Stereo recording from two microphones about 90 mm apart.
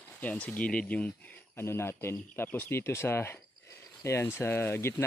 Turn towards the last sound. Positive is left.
turn(degrees=25)  # may be behind; listen again after turning